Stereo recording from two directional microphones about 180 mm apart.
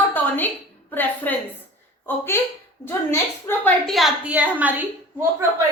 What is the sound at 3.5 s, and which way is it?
A woman's voice, 5° left (ahead or behind).